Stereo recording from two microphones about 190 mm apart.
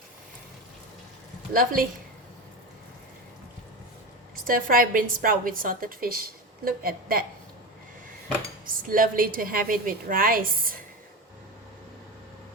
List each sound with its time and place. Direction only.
1.5 s a woman's voice: 45° right (ahead or behind)
4.4 s a woman's voice: 50° right (ahead or behind)
8.9 s a woman's voice: 45° right (ahead or behind)